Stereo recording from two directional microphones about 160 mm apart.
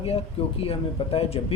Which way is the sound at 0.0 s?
35° left (ahead or behind).